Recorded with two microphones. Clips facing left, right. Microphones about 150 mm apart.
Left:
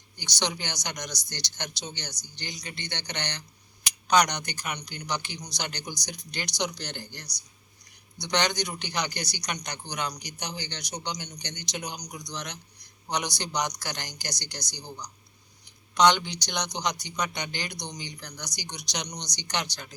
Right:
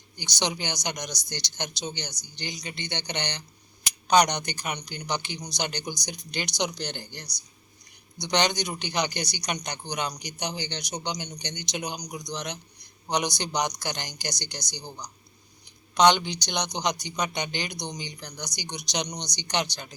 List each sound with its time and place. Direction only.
0.2 s a man's voice: 15° right (ahead or behind)